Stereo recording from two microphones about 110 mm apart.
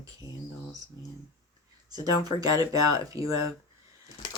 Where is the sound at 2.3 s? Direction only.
30° right (ahead or behind).